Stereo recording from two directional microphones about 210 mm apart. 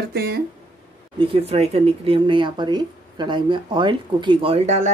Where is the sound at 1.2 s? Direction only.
25° right (ahead or behind).